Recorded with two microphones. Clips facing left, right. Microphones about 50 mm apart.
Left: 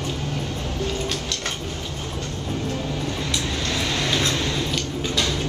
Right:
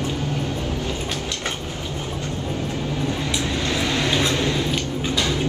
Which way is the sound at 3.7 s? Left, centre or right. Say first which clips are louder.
Right 2 dB; centre.